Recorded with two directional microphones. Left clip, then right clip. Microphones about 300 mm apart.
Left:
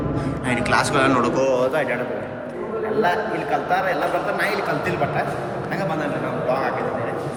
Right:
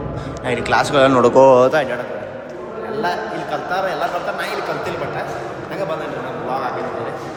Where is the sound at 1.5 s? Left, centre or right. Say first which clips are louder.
Right 7 dB; right.